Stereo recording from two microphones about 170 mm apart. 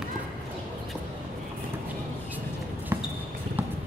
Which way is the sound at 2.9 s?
15° right (ahead or behind).